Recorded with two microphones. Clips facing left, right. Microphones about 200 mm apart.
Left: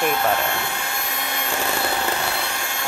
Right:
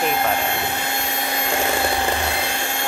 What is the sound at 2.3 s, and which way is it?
Vacuum cleaner, 20° right (ahead or behind).